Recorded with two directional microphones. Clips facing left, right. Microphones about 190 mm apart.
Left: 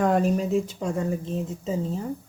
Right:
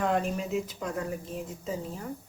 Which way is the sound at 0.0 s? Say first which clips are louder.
Left 6 dB; 40° left (ahead or behind).